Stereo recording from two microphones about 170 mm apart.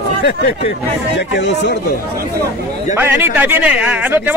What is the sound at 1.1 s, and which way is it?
Speech, 90° left.